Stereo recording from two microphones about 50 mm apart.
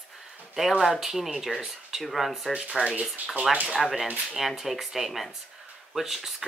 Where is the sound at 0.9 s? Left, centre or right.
Centre.